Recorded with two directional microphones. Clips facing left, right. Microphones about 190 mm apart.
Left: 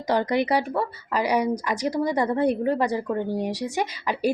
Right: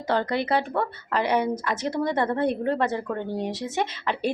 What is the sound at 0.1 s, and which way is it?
A woman's voice, 15° left (ahead or behind).